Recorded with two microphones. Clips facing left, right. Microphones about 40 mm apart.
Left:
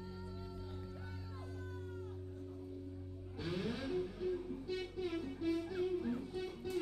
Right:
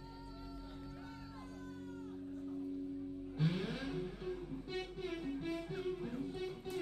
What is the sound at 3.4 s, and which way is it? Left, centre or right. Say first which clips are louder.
Music: even; centre.